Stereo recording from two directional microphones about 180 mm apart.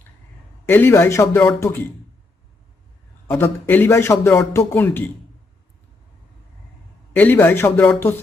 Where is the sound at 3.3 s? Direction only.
10° left (ahead or behind).